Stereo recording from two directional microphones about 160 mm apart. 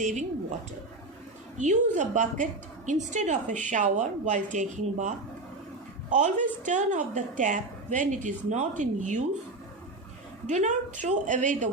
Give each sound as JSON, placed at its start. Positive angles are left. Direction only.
{"t": 0.0, "sound": "a woman's voice", "side_deg": -50}
{"t": 1.5, "sound": "a woman's voice", "side_deg": -50}
{"t": 10.5, "sound": "a woman's voice", "side_deg": -50}